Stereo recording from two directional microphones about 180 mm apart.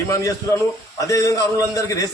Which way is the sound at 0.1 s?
20° left (ahead or behind).